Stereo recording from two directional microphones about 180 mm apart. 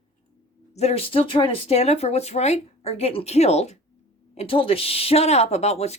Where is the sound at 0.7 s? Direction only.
35° left (ahead or behind).